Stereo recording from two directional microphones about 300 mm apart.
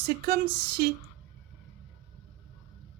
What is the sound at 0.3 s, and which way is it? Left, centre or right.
Speech, right.